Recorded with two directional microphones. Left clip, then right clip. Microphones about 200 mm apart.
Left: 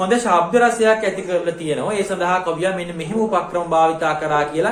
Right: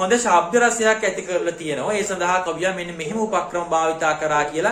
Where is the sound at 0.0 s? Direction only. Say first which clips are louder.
Left 1 dB; 20° right (ahead or behind).